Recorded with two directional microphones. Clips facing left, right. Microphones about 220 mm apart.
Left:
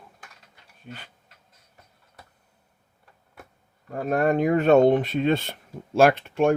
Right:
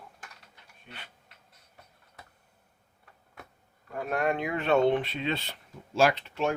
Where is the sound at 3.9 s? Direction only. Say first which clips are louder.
Left 6 dB; 40° left (ahead or behind).